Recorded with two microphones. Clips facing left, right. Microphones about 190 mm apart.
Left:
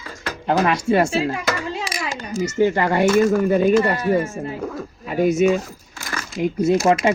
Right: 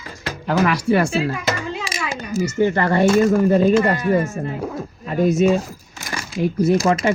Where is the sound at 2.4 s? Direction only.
15° left (ahead or behind).